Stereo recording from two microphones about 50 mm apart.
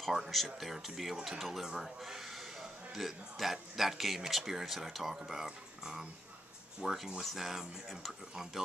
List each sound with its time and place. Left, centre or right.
0.3 s speech: centre
1.1 s speech: centre
1.4 s speech: centre